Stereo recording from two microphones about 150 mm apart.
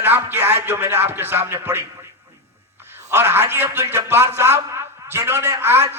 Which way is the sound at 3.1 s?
15° right (ahead or behind).